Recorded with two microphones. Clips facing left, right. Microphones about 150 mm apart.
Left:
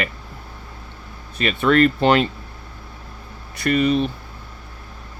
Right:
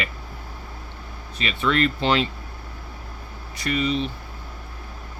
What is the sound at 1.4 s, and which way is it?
Speech, 50° left (ahead or behind).